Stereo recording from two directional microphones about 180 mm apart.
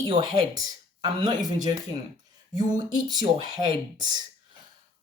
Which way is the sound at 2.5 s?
25° right (ahead or behind).